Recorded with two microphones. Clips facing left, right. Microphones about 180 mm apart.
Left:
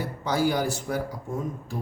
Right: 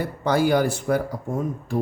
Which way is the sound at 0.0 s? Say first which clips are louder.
Right 4 dB; 60° right (ahead or behind).